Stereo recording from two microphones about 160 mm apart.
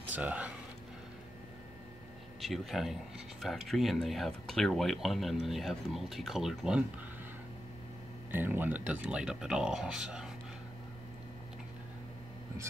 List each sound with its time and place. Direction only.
0.1 s speech: 10° right (ahead or behind)
2.4 s speech: centre (ahead or behind)
8.3 s speech: 10° right (ahead or behind)